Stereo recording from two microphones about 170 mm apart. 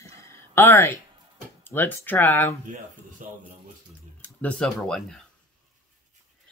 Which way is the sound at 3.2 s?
50° right (ahead or behind).